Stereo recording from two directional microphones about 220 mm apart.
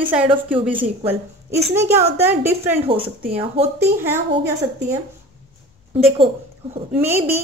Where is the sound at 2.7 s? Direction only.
25° right (ahead or behind).